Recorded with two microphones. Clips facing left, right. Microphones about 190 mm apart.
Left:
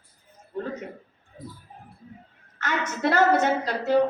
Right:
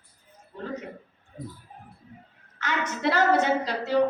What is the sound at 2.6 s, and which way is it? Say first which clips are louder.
Speech: left 1 dB; 50° left (ahead or behind).